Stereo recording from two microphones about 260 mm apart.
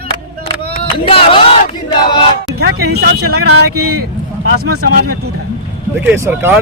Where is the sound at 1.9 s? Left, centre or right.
Centre.